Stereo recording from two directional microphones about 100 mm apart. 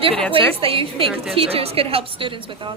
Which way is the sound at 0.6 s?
70° right (ahead or behind).